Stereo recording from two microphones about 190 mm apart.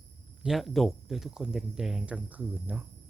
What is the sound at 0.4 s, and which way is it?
Speech, centre (ahead or behind).